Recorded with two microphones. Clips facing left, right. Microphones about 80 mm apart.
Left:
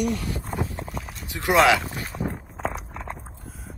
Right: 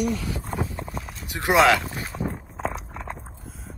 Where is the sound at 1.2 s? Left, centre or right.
Right.